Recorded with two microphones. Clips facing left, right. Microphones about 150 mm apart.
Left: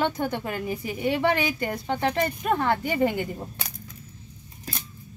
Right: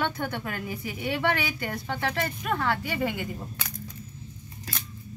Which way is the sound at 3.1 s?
35° left (ahead or behind).